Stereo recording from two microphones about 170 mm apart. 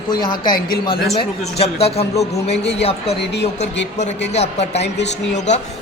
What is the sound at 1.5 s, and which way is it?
A man's voice, 35° left (ahead or behind).